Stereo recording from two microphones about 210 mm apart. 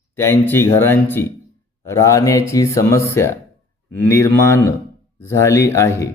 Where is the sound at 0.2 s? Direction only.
10° left (ahead or behind).